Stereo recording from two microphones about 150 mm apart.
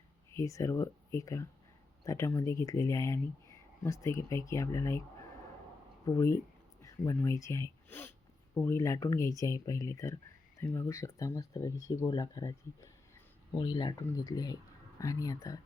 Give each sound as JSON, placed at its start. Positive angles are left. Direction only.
{"t": 0.3, "sound": "speech", "side_deg": 20}
{"t": 6.1, "sound": "speech", "side_deg": 20}